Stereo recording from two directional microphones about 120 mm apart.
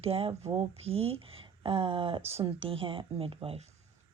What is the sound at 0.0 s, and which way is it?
Speech, 50° right (ahead or behind).